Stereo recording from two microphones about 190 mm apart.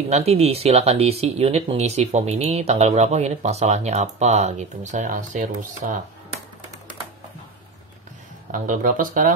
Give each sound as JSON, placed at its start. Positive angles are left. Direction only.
{"t": 0.1, "sound": "speech", "side_deg": -35}
{"t": 8.5, "sound": "speech", "side_deg": -45}